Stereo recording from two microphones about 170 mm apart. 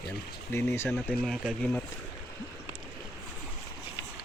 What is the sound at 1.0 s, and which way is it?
Speech, centre (ahead or behind).